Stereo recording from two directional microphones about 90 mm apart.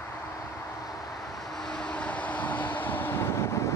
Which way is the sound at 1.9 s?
15° left (ahead or behind).